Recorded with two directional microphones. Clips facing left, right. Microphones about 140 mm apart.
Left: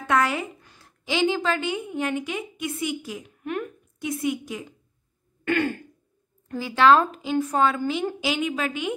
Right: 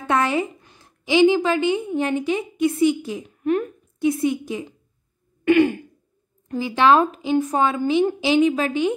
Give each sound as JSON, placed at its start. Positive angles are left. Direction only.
{"t": 0.0, "sound": "a woman's voice", "side_deg": -25}
{"t": 1.9, "sound": "a woman's voice", "side_deg": -30}
{"t": 5.4, "sound": "throat clearing", "side_deg": -15}
{"t": 6.5, "sound": "a woman's voice", "side_deg": -20}